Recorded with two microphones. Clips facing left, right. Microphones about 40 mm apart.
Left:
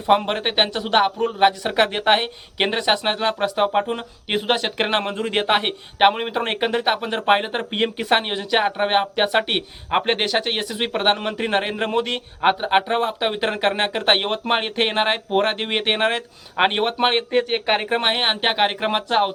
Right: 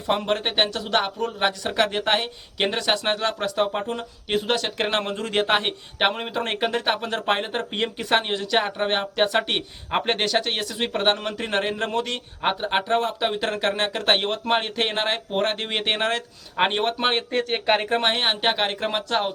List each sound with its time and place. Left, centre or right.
0.0 s speech: left